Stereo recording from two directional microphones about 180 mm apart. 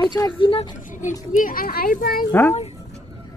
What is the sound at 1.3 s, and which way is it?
Speech, 50° left (ahead or behind).